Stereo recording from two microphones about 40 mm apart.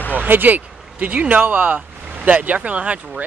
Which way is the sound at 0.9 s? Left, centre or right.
Right.